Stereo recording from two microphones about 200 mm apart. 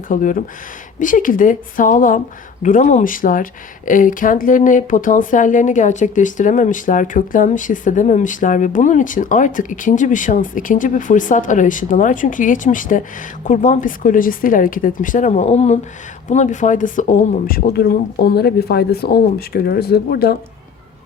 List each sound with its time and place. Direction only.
0.1 s speech: 40° left (ahead or behind)